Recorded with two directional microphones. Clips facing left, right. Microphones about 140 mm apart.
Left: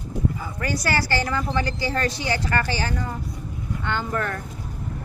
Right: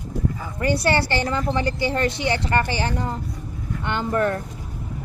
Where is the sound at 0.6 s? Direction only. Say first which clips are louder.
Right 5 dB; 25° right (ahead or behind).